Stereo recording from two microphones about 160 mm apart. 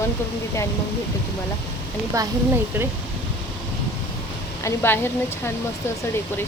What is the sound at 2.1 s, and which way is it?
Speech, 20° right (ahead or behind).